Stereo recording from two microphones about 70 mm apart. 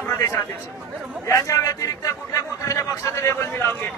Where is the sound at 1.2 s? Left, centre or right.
Left.